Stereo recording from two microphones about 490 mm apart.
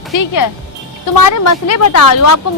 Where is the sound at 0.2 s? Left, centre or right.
Left.